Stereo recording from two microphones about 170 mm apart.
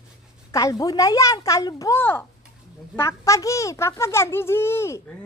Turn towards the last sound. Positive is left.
turn(degrees=15)  # may be behind; listen again after turning